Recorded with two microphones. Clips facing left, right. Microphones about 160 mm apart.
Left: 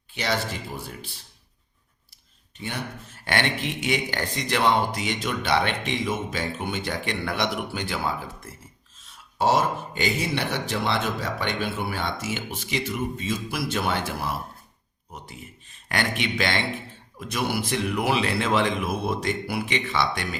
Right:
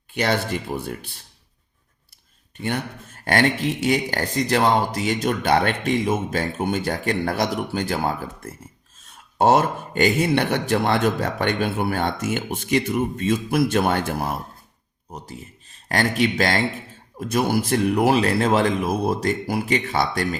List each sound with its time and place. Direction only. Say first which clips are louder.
0.1 s speech: right 5 dB; 55° right (ahead or behind)
2.6 s speech: right 6 dB; 55° right (ahead or behind)